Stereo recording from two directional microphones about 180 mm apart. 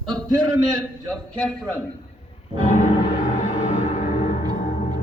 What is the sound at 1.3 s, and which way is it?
Speech, 5° left (ahead or behind).